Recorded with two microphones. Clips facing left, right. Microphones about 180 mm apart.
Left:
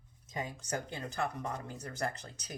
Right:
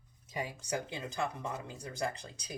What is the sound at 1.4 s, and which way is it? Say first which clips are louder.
Speech: even; 10° right (ahead or behind).